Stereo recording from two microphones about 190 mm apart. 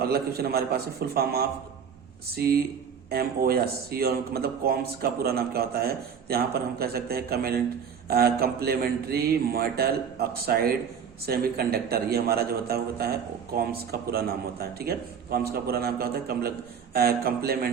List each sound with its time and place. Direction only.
0.0 s a man's voice: 55° right (ahead or behind)